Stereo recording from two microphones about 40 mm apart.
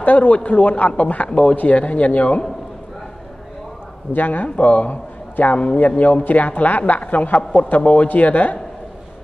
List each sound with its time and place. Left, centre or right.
0.0 s a man's voice: left
4.1 s a man's voice: left